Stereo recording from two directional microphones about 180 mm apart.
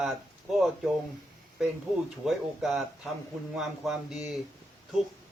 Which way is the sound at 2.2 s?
Centre (ahead or behind).